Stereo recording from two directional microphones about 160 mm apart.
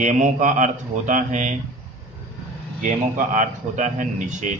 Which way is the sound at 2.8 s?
55° right (ahead or behind).